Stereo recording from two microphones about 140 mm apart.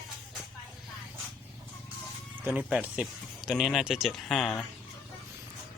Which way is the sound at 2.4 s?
10° right (ahead or behind).